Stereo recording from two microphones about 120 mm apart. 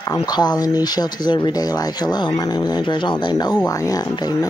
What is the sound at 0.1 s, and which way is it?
Speech, 35° left (ahead or behind).